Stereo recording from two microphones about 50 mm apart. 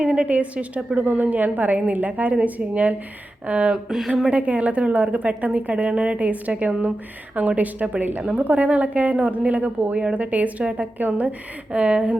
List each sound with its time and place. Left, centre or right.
0.0 s a woman's voice: right
3.8 s speech: centre
4.3 s a woman's voice: right
10.9 s a woman's voice: right